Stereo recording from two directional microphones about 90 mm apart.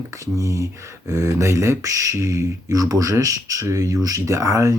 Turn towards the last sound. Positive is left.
turn(degrees=-35)  # may be behind; listen again after turning